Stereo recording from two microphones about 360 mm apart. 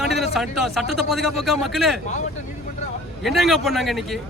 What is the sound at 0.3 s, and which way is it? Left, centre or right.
A man's voice, centre.